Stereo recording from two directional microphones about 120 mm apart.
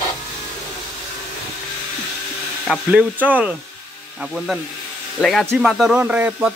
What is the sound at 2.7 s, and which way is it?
Speech, 10° right (ahead or behind).